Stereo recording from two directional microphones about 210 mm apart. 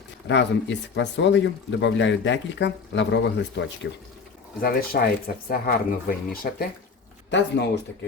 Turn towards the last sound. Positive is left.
turn(degrees=55)  # may be behind; listen again after turning